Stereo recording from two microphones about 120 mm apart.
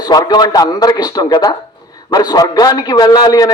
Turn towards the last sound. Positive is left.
turn(degrees=30)  # may be behind; listen again after turning